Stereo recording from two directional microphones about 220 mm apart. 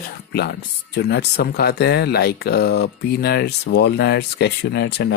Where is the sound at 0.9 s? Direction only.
50° left (ahead or behind).